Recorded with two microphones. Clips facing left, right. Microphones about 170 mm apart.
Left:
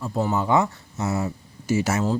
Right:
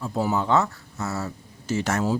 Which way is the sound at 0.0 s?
5° right (ahead or behind).